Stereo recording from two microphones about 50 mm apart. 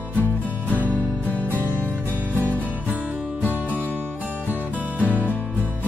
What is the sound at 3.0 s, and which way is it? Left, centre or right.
Music, right.